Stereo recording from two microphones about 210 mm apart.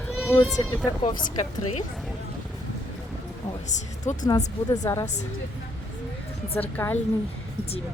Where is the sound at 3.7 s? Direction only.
35° left (ahead or behind).